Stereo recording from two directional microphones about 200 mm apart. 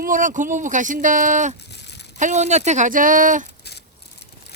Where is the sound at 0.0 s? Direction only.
40° right (ahead or behind).